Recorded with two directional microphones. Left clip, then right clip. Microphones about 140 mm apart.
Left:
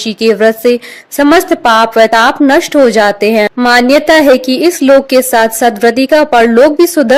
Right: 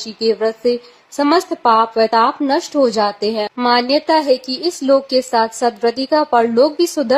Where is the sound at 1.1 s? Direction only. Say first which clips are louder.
Left 8 dB; 40° left (ahead or behind).